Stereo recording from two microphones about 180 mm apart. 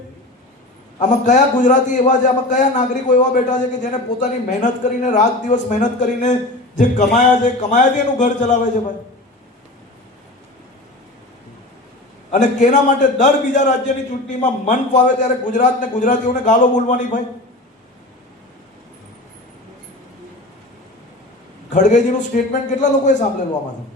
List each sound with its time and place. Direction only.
0.9 s a man's voice: 45° left (ahead or behind)
12.3 s a man's voice: 45° left (ahead or behind)
21.7 s a man's voice: 45° left (ahead or behind)